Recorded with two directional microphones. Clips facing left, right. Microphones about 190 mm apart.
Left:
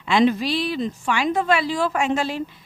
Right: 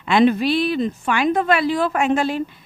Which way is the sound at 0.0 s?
55° right (ahead or behind).